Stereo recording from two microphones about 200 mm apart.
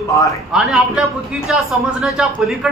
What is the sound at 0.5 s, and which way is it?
A man's voice, centre (ahead or behind).